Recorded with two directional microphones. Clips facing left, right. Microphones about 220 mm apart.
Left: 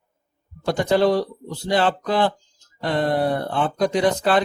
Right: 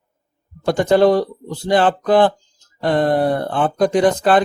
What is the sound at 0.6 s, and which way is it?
Speech, 50° right (ahead or behind).